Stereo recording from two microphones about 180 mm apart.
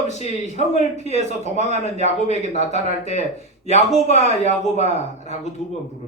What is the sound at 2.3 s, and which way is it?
Speech, 40° left (ahead or behind).